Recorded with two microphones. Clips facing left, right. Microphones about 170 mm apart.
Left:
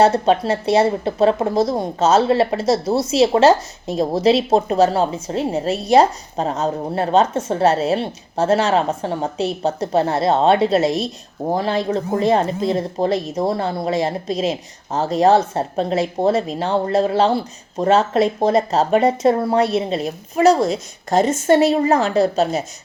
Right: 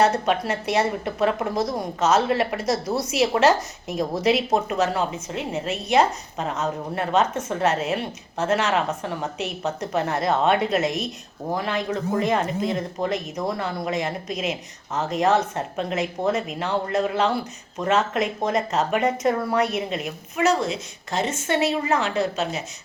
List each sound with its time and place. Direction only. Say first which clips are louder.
0.0 s speech: left 6 dB; 30° left (ahead or behind)